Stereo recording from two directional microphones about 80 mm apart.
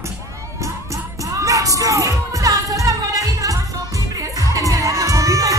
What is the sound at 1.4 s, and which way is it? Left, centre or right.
Music, right.